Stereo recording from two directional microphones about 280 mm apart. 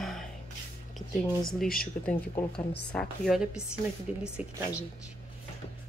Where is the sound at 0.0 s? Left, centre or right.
Centre.